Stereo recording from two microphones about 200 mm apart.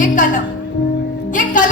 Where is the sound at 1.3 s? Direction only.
40° left (ahead or behind).